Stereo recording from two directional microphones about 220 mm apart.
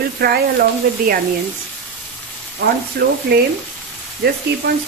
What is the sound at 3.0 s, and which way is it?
Speech, 45° right (ahead or behind).